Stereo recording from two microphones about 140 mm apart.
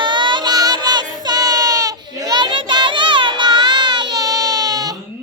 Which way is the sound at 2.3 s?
35° right (ahead or behind).